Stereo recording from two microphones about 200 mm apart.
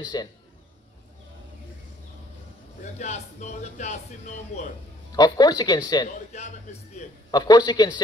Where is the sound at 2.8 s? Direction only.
35° left (ahead or behind).